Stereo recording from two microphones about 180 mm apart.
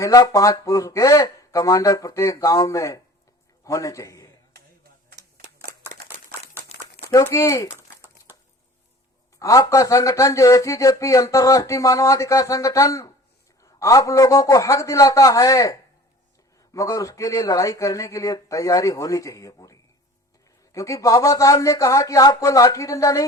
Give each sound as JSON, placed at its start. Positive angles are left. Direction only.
{"t": 0.0, "sound": "a man's voice", "side_deg": 20}
{"t": 5.0, "sound": "a sound", "side_deg": -45}
{"t": 6.6, "sound": "crumpling", "side_deg": -10}
{"t": 7.1, "sound": "speech", "side_deg": 20}
{"t": 9.4, "sound": "speech", "side_deg": 20}
{"t": 20.7, "sound": "speech", "side_deg": 20}